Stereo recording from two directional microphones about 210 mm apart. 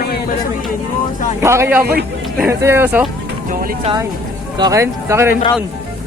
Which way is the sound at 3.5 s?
45° right (ahead or behind).